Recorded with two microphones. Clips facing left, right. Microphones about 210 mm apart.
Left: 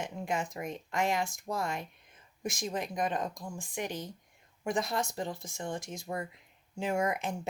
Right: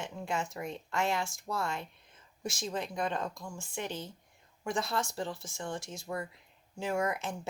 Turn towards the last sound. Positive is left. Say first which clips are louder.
# left 1 dB
turn(degrees=20)  # may be behind; listen again after turning